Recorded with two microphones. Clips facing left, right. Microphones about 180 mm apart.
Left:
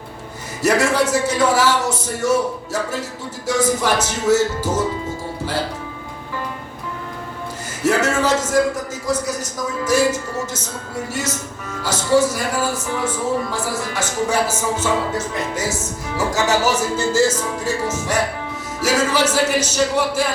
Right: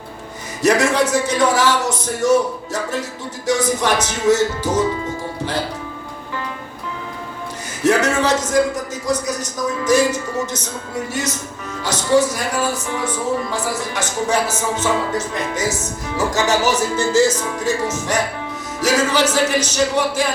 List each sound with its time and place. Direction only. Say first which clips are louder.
0.6 s speech: right 1 dB; 5° left (ahead or behind)
3.4 s speech: even; 5° left (ahead or behind)
7.9 s speech: right 1 dB; 5° left (ahead or behind)
11.8 s speech: even; 5° left (ahead or behind)
16.1 s speech: right 1 dB; 10° left (ahead or behind)